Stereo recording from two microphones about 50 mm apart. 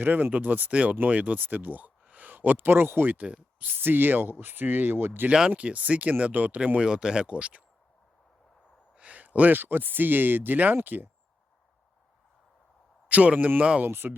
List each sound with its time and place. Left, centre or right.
0.0 s speech: right
3.2 s speech: right
3.8 s speech: right
5.5 s speech: right
6.7 s speech: centre
9.0 s a sound: right
9.6 s speech: right
13.1 s a man's voice: right
13.8 s speech: right